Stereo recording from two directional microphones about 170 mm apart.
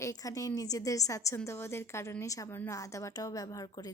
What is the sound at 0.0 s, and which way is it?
A woman's voice, 20° left (ahead or behind).